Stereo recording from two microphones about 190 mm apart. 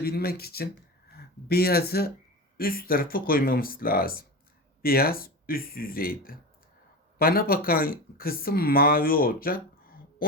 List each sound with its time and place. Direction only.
0.0 s speech: 55° left (ahead or behind)